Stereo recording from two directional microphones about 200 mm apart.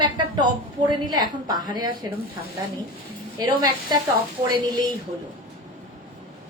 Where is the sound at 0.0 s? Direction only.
20° right (ahead or behind).